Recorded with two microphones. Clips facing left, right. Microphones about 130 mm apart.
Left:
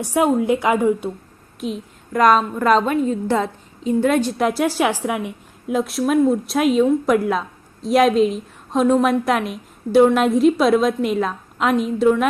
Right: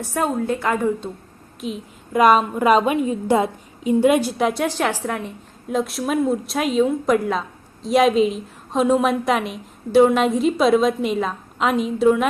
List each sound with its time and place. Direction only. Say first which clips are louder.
0.0 s a woman's voice: left 5 dB; 15° left (ahead or behind)
1.6 s a woman's voice: left 2 dB; 5° right (ahead or behind)